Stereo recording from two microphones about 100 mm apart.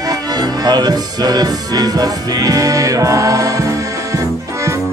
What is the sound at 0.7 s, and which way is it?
Music, 40° right (ahead or behind).